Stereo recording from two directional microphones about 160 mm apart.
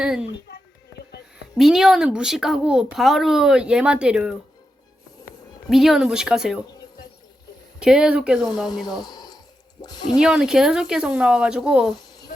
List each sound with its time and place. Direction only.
0.0 s speech: 5° right (ahead or behind)
1.5 s speech: centre (ahead or behind)
5.6 s speech: centre (ahead or behind)
7.8 s speech: 5° right (ahead or behind)
9.0 s a sound: 25° left (ahead or behind)
9.8 s speech: 25° left (ahead or behind)
10.2 s speech: 5° right (ahead or behind)